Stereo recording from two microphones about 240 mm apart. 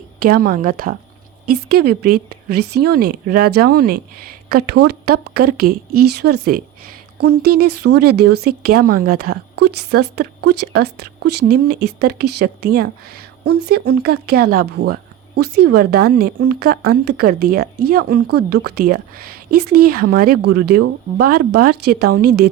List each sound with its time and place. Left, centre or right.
0.2 s speech: right